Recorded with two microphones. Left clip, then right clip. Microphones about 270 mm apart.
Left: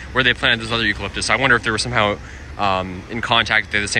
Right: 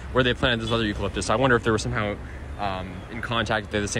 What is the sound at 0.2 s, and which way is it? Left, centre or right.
Speech, centre.